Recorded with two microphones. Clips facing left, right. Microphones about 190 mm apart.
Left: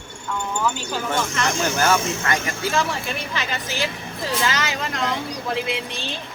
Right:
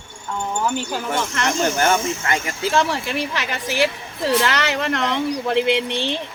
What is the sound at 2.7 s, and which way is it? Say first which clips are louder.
A woman's voice: right 6 dB; 70° right (ahead or behind).